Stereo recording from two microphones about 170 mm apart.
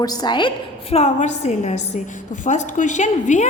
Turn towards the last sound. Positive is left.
turn(degrees=45)  # may be behind; listen again after turning